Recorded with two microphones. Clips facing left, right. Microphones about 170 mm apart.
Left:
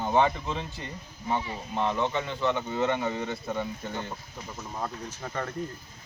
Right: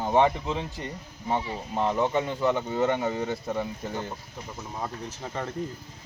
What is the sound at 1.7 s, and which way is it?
Speech, 10° right (ahead or behind).